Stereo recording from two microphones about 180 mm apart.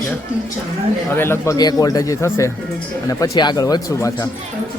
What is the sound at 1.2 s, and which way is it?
Speech, 15° left (ahead or behind).